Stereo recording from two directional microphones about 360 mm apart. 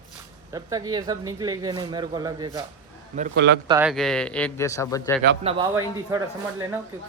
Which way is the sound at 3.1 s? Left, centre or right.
Right.